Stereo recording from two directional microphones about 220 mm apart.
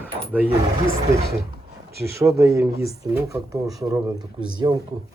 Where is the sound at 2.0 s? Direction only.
10° right (ahead or behind).